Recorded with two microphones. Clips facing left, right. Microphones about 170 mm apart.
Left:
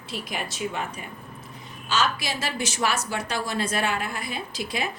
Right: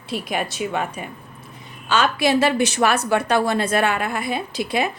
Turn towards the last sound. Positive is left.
turn(degrees=-60)  # may be behind; listen again after turning